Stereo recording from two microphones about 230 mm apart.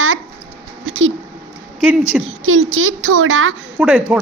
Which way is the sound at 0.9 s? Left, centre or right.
Right.